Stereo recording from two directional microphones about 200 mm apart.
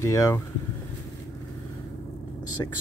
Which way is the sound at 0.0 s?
15° left (ahead or behind).